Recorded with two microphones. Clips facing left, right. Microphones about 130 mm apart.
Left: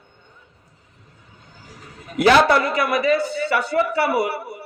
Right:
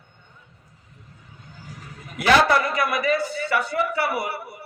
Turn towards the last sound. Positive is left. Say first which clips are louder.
# left 5 dB
turn(degrees=30)  # may be behind; listen again after turning